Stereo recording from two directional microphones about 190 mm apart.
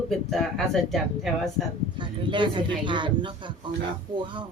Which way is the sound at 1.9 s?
25° right (ahead or behind).